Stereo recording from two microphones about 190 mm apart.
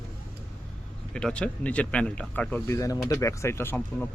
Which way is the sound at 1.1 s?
5° left (ahead or behind).